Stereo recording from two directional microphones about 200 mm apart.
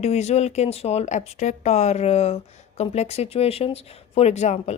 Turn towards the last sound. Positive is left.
turn(degrees=35)  # may be behind; listen again after turning